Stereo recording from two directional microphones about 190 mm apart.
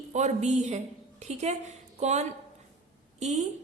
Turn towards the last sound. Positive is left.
turn(degrees=-35)  # may be behind; listen again after turning